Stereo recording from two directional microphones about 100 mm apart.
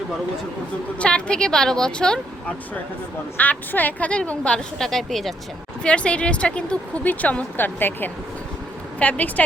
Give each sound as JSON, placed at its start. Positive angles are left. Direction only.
{"t": 0.9, "sound": "speech", "side_deg": 10}
{"t": 3.3, "sound": "speech", "side_deg": 15}